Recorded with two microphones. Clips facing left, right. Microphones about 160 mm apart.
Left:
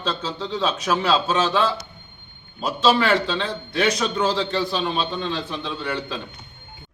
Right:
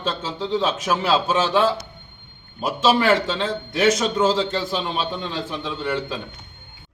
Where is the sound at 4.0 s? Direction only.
20° right (ahead or behind).